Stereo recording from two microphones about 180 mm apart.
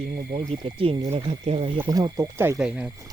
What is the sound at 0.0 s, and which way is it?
Speech, 35° right (ahead or behind).